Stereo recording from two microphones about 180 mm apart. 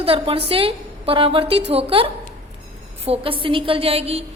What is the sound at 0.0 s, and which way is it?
A woman's voice, 30° right (ahead or behind).